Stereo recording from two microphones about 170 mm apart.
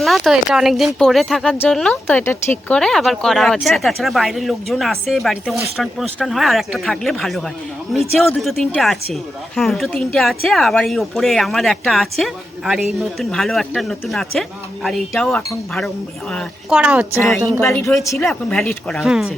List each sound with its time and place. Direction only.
0.0 s speech: centre (ahead or behind)
16.7 s a woman's voice: 10° right (ahead or behind)
18.0 s speech: 20° left (ahead or behind)
18.3 s speech: centre (ahead or behind)